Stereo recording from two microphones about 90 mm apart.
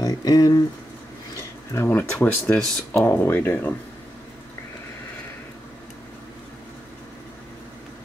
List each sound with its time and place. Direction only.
0.0 s speech: 45° left (ahead or behind)
1.7 s speech: 25° left (ahead or behind)